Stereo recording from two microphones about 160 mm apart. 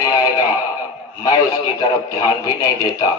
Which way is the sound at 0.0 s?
20° left (ahead or behind).